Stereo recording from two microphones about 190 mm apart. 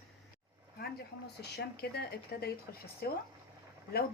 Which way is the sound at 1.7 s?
55° left (ahead or behind).